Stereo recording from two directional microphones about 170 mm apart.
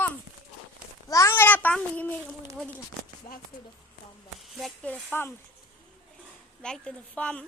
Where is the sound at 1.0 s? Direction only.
20° left (ahead or behind).